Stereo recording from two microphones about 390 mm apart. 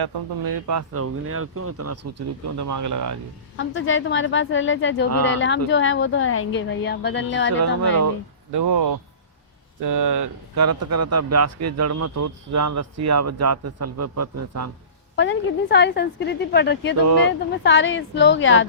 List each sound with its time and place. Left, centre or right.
0.0 s speech: right
3.6 s a woman's voice: left
8.5 s speech: right
15.1 s a woman's voice: left